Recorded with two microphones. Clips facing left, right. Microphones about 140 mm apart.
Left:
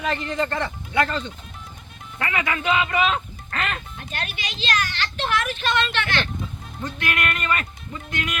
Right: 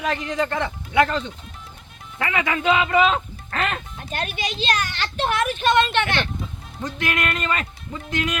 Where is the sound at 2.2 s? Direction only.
20° right (ahead or behind).